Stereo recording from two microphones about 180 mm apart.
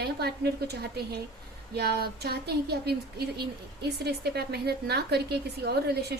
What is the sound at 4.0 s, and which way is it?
A woman's voice, 65° right (ahead or behind).